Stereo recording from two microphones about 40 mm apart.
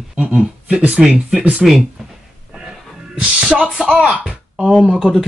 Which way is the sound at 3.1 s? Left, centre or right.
Right.